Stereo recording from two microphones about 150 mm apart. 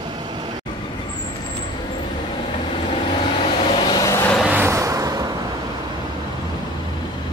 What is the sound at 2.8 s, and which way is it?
Vehicle, 35° left (ahead or behind).